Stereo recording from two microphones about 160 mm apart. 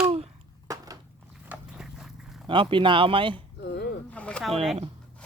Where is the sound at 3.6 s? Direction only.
85° left.